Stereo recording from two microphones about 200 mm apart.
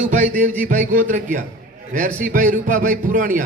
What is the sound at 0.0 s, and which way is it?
A man's voice, 40° right (ahead or behind).